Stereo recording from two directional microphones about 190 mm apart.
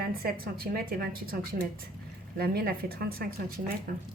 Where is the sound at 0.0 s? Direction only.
50° right (ahead or behind).